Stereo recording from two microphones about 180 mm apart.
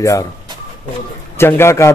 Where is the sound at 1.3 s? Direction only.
15° left (ahead or behind).